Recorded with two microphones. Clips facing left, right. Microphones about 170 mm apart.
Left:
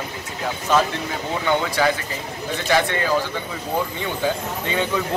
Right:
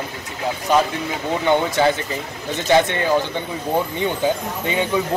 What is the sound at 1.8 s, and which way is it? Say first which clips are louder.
A man's voice: right 3 dB; 25° right (ahead or behind).